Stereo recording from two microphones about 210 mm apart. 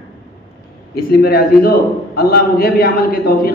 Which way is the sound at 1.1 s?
45° left (ahead or behind).